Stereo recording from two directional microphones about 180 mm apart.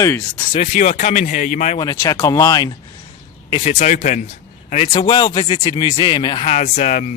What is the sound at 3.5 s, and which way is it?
Speech, 35° left (ahead or behind).